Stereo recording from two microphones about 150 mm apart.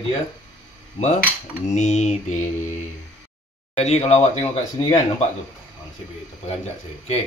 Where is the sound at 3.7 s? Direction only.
45° left (ahead or behind).